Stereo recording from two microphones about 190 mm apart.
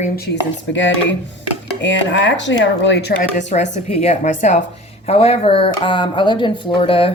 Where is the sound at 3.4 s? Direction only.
40° left (ahead or behind).